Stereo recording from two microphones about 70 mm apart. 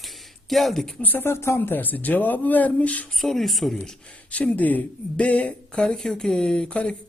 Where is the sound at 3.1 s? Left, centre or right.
Centre.